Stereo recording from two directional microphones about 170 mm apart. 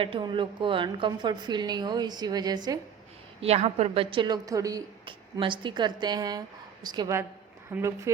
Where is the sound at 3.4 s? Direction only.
40° right (ahead or behind).